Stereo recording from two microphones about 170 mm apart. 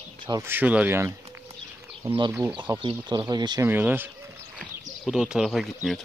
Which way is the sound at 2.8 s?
30° right (ahead or behind).